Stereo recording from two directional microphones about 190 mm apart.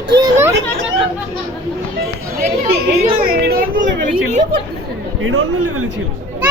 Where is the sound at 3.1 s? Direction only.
50° right (ahead or behind).